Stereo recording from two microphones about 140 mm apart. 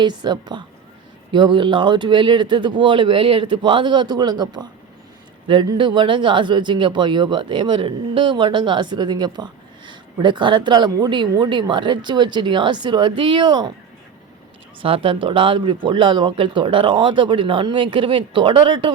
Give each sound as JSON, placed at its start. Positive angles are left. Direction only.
{"t": 0.0, "sound": "speech", "side_deg": -30}
{"t": 14.8, "sound": "speech", "side_deg": -40}